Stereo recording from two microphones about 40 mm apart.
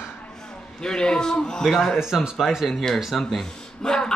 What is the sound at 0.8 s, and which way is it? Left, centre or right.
Speech, centre.